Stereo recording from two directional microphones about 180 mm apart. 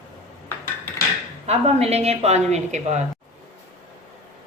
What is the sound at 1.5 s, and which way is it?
A woman's voice, 35° right (ahead or behind).